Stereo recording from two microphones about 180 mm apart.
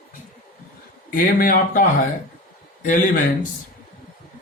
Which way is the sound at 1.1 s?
50° left (ahead or behind).